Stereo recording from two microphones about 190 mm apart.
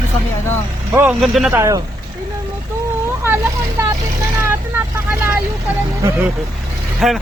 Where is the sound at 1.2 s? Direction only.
Centre (ahead or behind).